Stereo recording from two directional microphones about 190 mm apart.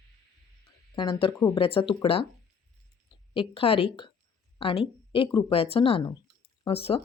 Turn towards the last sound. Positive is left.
turn(degrees=30)  # may be behind; listen again after turning